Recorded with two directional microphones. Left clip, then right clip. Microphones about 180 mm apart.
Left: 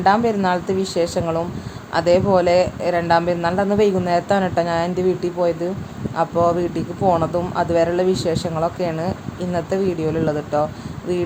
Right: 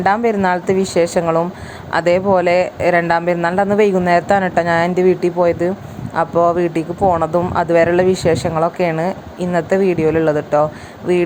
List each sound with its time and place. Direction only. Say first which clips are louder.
0.0 s speech: right 2 dB; 20° right (ahead or behind)